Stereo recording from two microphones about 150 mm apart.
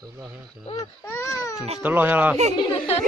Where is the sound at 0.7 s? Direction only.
20° left (ahead or behind).